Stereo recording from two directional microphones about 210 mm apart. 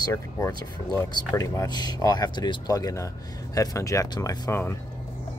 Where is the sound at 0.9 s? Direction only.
15° left (ahead or behind).